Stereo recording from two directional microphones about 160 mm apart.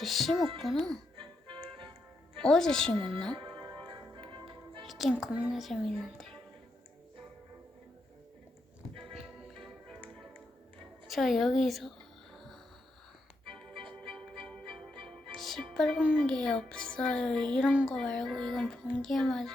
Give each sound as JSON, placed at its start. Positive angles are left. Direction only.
{"t": 0.0, "sound": "speech", "side_deg": 0}
{"t": 1.1, "sound": "music", "side_deg": -30}
{"t": 2.4, "sound": "speech", "side_deg": 5}
{"t": 3.3, "sound": "music", "side_deg": -30}
{"t": 4.9, "sound": "speech", "side_deg": 0}
{"t": 9.2, "sound": "music", "side_deg": 0}
{"t": 11.1, "sound": "music", "side_deg": 0}
{"t": 16.2, "sound": "speech", "side_deg": 5}
{"t": 17.9, "sound": "speech", "side_deg": 5}